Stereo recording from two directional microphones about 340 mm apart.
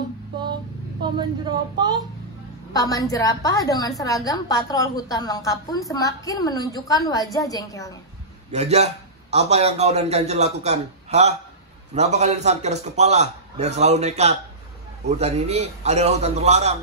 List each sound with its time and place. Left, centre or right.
1.0 s speech: centre
2.7 s a woman's voice: centre
8.5 s a man's voice: centre